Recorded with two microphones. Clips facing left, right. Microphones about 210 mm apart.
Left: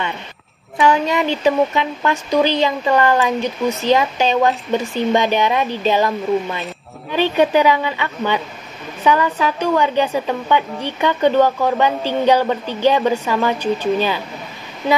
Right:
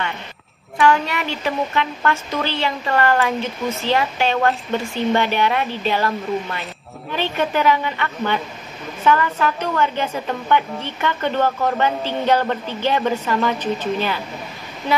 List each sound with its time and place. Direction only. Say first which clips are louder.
0.7 s a woman's voice: left 2 dB; 15° left (ahead or behind)